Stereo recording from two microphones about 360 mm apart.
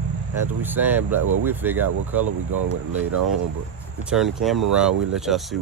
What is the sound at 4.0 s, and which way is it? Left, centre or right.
Speech, centre.